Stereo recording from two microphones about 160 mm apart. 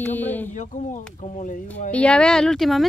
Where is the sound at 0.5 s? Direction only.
50° left (ahead or behind).